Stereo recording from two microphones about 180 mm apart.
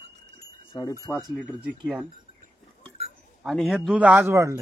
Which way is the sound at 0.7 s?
20° left (ahead or behind).